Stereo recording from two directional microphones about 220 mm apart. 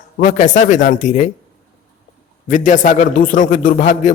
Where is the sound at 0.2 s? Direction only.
35° left (ahead or behind).